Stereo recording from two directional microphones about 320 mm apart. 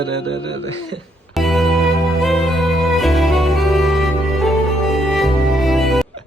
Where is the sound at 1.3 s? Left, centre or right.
Centre.